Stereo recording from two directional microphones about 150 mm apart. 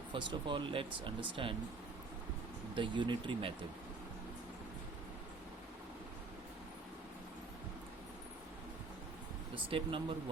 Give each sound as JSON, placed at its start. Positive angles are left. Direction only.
{"t": 0.1, "sound": "speech", "side_deg": -30}
{"t": 2.7, "sound": "speech", "side_deg": -30}
{"t": 9.6, "sound": "speech", "side_deg": -35}